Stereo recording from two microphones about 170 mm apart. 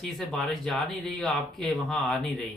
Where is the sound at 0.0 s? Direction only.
Centre (ahead or behind).